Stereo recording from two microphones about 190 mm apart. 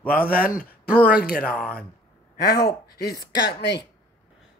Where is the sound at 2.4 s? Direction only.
55° left (ahead or behind).